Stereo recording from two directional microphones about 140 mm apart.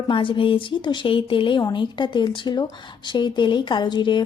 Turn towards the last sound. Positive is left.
turn(degrees=35)  # may be behind; listen again after turning